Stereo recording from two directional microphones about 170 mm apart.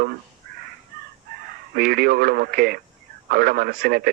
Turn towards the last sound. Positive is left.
turn(degrees=-60)  # may be behind; listen again after turning